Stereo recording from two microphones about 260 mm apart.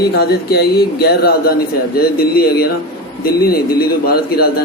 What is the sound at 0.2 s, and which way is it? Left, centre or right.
A man's voice, left.